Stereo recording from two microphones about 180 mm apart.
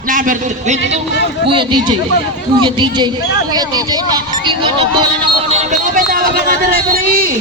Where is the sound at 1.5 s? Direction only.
25° right (ahead or behind).